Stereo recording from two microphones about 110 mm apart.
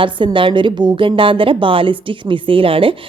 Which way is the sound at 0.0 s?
50° right (ahead or behind).